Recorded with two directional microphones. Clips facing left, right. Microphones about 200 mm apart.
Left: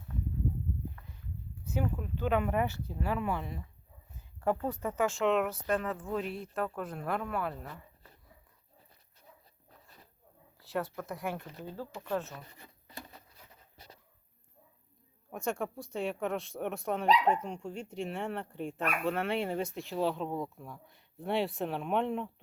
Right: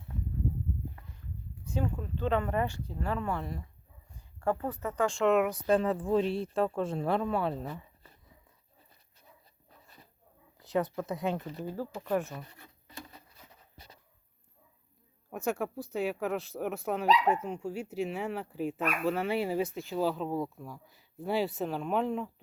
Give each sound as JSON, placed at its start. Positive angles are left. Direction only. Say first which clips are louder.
{"t": 2.0, "sound": "speech", "louder": "even", "side_deg": 5}
{"t": 4.6, "sound": "speech", "louder": "right 1 dB", "side_deg": 10}
{"t": 5.6, "sound": "speech", "louder": "right 6 dB", "side_deg": -30}
{"t": 10.6, "sound": "speech", "louder": "right 5 dB", "side_deg": -20}
{"t": 15.3, "sound": "speech", "louder": "right 2 dB", "side_deg": -5}